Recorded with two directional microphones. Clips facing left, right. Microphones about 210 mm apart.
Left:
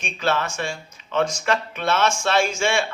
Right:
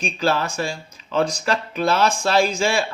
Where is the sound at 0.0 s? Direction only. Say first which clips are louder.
Right 2 dB; 35° right (ahead or behind).